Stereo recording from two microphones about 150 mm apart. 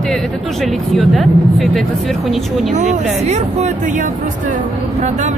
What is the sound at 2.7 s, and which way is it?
Speech, 50° right (ahead or behind).